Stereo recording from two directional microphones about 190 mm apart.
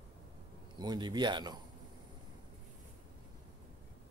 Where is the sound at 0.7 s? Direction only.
25° right (ahead or behind).